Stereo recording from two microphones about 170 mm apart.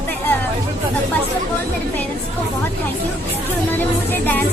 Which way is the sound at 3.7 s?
10° left (ahead or behind).